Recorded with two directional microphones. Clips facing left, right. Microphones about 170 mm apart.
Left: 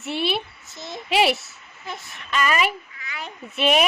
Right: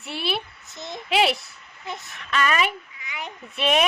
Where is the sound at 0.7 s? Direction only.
20° right (ahead or behind).